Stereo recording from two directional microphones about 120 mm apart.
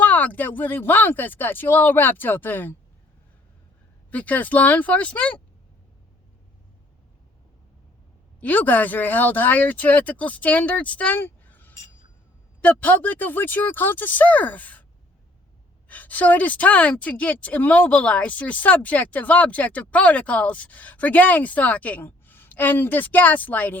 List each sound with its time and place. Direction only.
0.0 s a woman's voice: 10° left (ahead or behind)
4.1 s a woman's voice: 10° left (ahead or behind)
8.4 s a woman's voice: 15° left (ahead or behind)
15.9 s a woman's voice: 15° left (ahead or behind)